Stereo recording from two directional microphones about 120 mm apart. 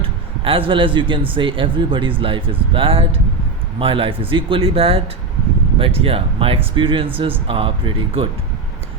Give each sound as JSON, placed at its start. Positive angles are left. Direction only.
{"t": 0.0, "sound": "a man's voice", "side_deg": -50}